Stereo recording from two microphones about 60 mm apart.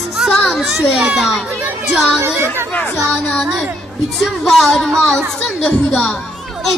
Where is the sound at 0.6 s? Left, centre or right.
Centre.